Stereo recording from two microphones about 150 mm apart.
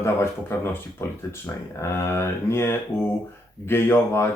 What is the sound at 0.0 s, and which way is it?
Speech, 15° left (ahead or behind).